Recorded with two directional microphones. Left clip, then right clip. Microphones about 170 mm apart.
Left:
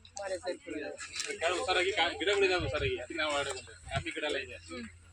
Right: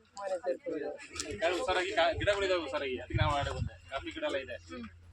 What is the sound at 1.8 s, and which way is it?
A man's voice, 50° right (ahead or behind).